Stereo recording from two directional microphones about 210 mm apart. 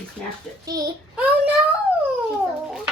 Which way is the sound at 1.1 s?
5° right (ahead or behind).